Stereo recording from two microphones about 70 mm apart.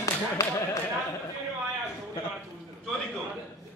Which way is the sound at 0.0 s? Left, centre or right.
Left.